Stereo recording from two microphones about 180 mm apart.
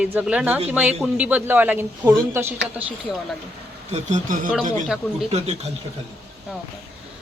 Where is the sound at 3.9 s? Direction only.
40° right (ahead or behind).